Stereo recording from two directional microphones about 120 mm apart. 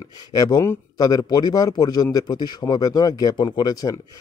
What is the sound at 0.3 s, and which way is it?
A man's voice, 30° left (ahead or behind).